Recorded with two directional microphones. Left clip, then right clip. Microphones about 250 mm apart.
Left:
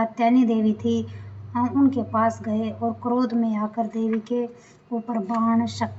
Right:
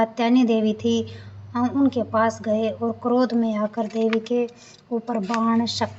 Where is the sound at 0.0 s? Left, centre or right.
Right.